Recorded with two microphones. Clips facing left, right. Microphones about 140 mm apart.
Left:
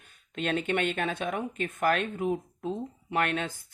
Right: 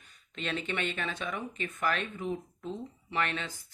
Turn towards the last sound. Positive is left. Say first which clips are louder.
# left 5 dB
turn(degrees=55)  # may be behind; listen again after turning